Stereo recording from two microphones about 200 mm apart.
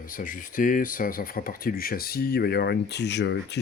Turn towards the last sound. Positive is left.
turn(degrees=60)  # may be behind; listen again after turning